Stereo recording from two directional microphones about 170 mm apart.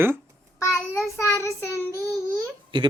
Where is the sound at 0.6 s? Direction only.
15° left (ahead or behind).